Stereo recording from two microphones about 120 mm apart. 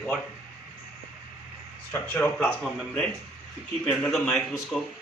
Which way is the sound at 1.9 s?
10° left (ahead or behind).